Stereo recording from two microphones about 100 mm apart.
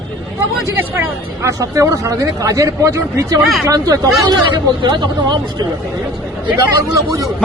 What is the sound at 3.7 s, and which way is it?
Speech, 35° right (ahead or behind).